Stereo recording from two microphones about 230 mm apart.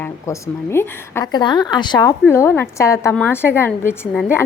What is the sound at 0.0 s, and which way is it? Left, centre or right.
A woman's voice, centre.